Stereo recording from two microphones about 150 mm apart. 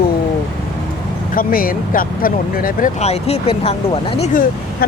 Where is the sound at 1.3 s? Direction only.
70° left (ahead or behind).